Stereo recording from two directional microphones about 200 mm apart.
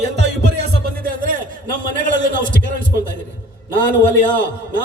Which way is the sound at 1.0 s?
45° right (ahead or behind).